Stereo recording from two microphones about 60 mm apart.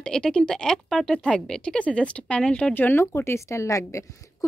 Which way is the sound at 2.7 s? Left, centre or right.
Left.